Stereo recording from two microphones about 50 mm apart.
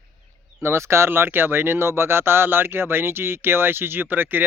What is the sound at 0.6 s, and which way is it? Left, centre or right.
Speech, right.